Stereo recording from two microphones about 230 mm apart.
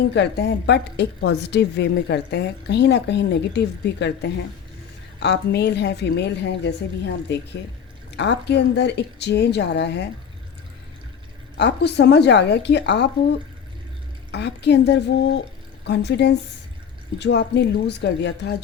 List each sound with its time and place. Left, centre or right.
0.0 s a woman's voice: left
5.2 s a woman's voice: left
11.5 s a woman's voice: left
14.3 s a woman's voice: left